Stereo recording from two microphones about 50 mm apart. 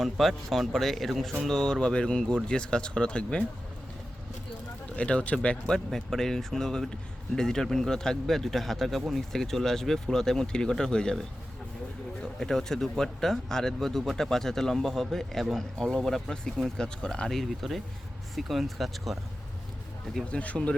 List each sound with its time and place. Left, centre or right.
0.0 s speech: centre; by 3.4 s left
4.9 s speech: left
12.4 s speech: centre
20.2 s speech: left